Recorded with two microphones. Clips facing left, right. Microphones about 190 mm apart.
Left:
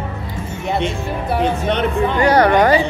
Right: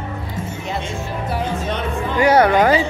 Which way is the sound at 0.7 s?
65° left (ahead or behind).